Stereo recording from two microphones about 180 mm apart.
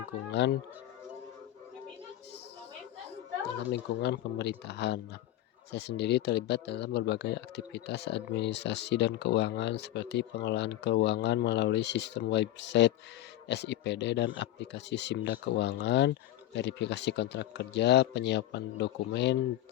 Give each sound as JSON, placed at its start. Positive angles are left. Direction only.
{"t": 0.3, "sound": "speech", "side_deg": 75}
{"t": 3.7, "sound": "speech", "side_deg": 70}